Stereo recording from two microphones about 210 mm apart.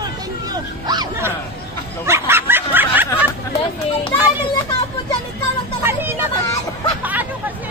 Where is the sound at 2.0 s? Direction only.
10° right (ahead or behind).